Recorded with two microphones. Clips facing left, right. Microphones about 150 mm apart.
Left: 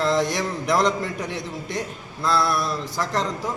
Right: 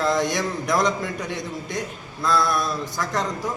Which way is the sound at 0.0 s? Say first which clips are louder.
Even; 30° left (ahead or behind).